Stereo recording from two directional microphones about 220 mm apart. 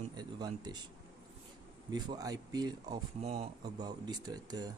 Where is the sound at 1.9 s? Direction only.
15° right (ahead or behind).